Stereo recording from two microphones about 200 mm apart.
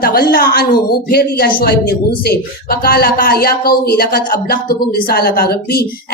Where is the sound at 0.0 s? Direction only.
50° left (ahead or behind).